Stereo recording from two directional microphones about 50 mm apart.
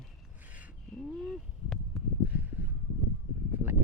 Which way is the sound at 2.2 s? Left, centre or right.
Right.